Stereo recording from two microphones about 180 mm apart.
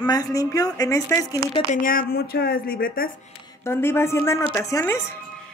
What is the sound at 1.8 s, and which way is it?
Speech, 55° left (ahead or behind).